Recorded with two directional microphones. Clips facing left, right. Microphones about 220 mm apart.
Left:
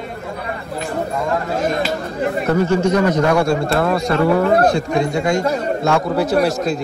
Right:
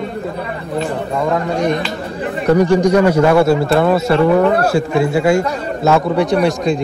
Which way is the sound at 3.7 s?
Centre (ahead or behind).